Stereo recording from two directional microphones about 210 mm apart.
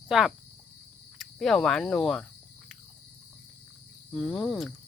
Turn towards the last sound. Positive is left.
turn(degrees=0)  # may be behind; listen again after turning